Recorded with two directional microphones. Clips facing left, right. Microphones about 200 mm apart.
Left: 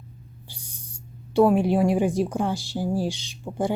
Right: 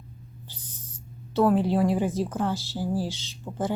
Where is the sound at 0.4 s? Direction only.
10° left (ahead or behind).